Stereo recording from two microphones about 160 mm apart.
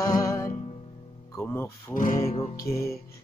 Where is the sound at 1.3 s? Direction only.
15° left (ahead or behind).